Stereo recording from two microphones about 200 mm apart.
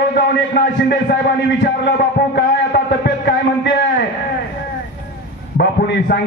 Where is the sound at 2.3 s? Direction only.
55° left (ahead or behind).